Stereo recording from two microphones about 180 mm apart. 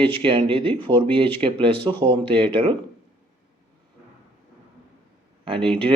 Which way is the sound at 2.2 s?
10° left (ahead or behind).